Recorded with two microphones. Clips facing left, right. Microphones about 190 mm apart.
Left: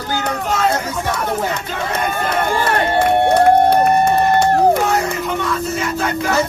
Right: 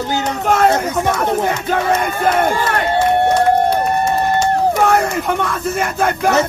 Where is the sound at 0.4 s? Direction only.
55° right (ahead or behind).